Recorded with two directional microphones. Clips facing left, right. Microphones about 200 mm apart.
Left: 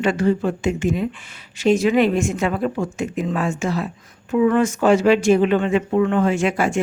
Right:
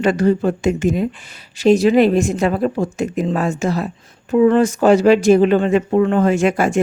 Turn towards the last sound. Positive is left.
turn(degrees=-45)  # may be behind; listen again after turning